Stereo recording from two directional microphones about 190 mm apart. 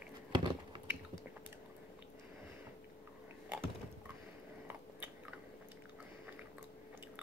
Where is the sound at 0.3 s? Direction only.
25° right (ahead or behind).